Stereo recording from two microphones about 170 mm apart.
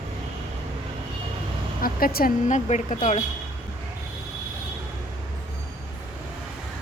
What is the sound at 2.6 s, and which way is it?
Speech, 45° left (ahead or behind).